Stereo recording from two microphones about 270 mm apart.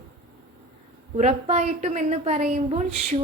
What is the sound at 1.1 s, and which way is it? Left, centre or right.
A woman's voice, right.